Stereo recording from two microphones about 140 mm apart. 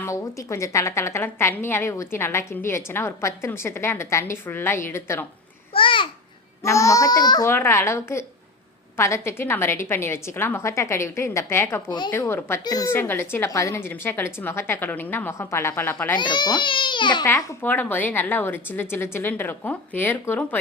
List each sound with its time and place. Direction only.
0.0 s a woman's voice: 20° left (ahead or behind)
5.7 s a child's voice: 35° left (ahead or behind)
6.6 s a woman's voice: 20° left (ahead or behind)
7.5 s a woman's voice: 20° left (ahead or behind)
11.9 s speech: 30° left (ahead or behind)
12.1 s speech: 15° left (ahead or behind)
16.1 s speech: 30° left (ahead or behind)
17.2 s speech: 15° left (ahead or behind)